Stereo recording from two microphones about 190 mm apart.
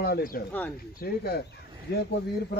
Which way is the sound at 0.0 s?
50° left (ahead or behind).